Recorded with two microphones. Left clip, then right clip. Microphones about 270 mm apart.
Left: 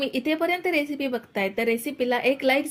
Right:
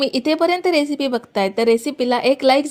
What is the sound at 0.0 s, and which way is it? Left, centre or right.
Speech, right.